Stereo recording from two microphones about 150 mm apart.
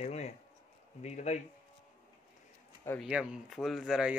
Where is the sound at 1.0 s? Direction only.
50° left (ahead or behind).